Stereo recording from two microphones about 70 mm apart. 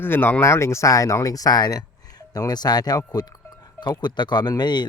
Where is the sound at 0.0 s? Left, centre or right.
Left.